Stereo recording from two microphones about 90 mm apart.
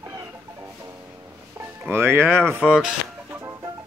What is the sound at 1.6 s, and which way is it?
Music, 25° right (ahead or behind).